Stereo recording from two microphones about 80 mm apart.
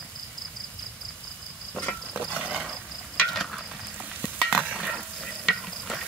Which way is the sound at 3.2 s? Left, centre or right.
Centre.